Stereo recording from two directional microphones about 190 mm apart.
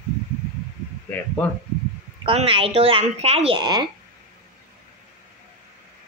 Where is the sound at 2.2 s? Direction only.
30° right (ahead or behind).